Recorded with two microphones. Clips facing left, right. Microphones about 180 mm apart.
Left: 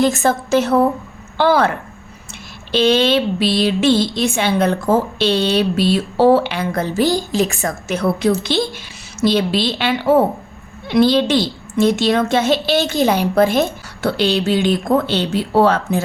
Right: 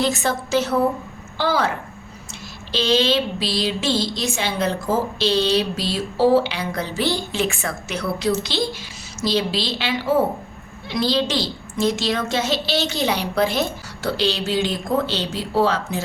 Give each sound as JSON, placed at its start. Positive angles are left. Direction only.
{"t": 0.0, "sound": "a woman's voice", "side_deg": 50}
{"t": 2.7, "sound": "a woman's voice", "side_deg": 55}